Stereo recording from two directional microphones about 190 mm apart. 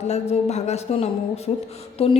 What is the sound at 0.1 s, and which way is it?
A woman's voice, 35° left (ahead or behind).